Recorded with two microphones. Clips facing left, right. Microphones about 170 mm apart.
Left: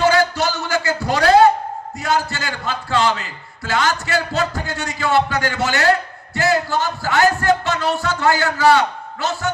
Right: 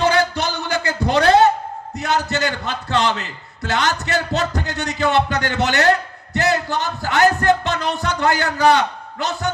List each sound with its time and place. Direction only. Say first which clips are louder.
0.0 s music: left 2 dB; 20° right (ahead or behind)
2.0 s a man's voice: right 1 dB; 20° right (ahead or behind)